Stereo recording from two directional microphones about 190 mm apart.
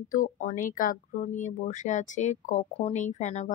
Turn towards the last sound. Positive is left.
turn(degrees=40)  # may be behind; listen again after turning